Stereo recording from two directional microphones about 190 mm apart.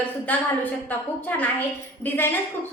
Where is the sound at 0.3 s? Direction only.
10° left (ahead or behind).